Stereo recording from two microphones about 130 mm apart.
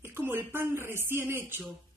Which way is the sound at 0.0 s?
15° right (ahead or behind).